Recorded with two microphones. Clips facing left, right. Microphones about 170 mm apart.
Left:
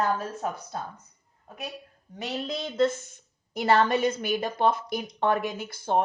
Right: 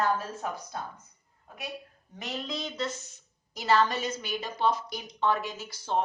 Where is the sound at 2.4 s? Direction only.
50° left (ahead or behind).